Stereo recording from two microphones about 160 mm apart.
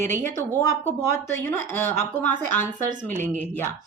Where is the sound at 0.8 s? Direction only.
15° left (ahead or behind).